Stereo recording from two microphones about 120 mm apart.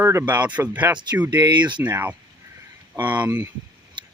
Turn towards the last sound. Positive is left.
turn(degrees=-15)  # may be behind; listen again after turning